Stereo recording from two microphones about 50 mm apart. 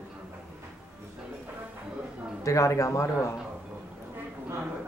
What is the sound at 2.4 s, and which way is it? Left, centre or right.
Speech, left.